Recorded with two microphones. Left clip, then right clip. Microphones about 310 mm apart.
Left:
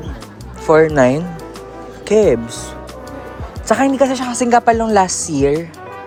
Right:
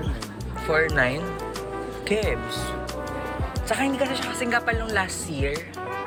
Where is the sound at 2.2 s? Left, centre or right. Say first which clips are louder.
Left 12 dB; left.